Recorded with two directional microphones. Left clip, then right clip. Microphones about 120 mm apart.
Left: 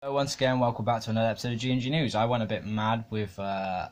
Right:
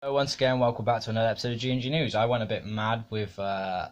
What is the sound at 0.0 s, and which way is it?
Speech, 30° right (ahead or behind).